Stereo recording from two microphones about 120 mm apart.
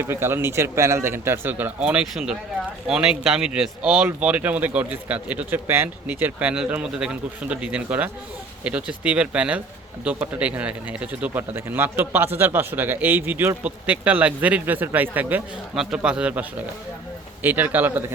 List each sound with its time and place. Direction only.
0.0 s speech: 20° right (ahead or behind)
15.7 s speech: 5° right (ahead or behind)